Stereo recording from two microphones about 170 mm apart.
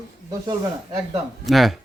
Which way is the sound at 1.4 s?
Centre (ahead or behind).